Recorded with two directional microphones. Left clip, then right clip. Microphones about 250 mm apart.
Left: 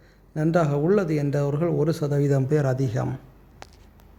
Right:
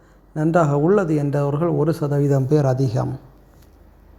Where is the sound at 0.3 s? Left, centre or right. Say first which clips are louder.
Right 5 dB; centre.